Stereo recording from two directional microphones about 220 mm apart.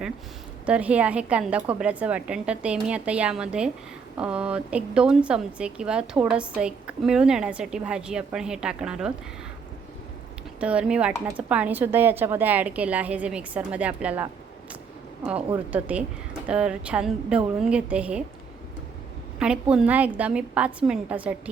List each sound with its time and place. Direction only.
0.6 s a woman's voice: 5° right (ahead or behind)
10.6 s a woman's voice: 5° right (ahead or behind)
15.5 s a woman's voice: 5° right (ahead or behind)
19.4 s a woman's voice: 5° right (ahead or behind)